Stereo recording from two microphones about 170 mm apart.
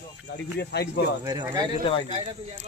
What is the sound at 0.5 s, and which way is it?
Speech, 70° left (ahead or behind).